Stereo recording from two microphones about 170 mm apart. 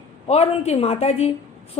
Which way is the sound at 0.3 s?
40° left (ahead or behind).